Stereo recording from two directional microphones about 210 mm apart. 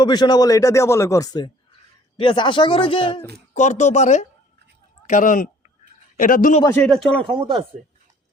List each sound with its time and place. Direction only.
0.0 s speech: 20° left (ahead or behind); by 6.6 s 40° left (ahead or behind)
6.7 s speech: 5° left (ahead or behind)
7.3 s speech: 25° right (ahead or behind)